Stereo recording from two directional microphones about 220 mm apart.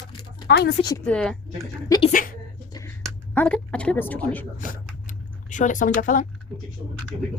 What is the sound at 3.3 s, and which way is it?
A woman's voice, 5° left (ahead or behind).